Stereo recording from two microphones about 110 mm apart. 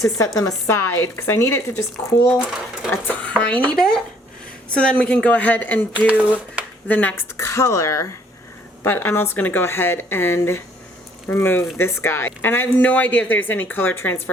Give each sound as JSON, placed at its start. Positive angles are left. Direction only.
{"t": 0.3, "sound": "speech", "side_deg": 30}
{"t": 6.1, "sound": "speech", "side_deg": -15}
{"t": 6.8, "sound": "speech", "side_deg": 15}
{"t": 7.3, "sound": "speech", "side_deg": 25}